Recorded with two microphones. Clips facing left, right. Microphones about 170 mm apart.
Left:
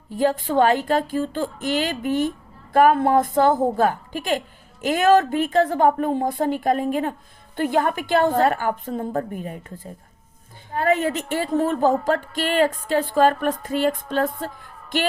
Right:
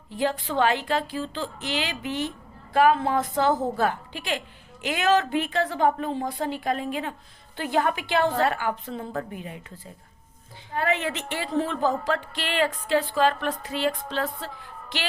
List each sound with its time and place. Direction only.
0.1 s a woman's voice: 45° left (ahead or behind)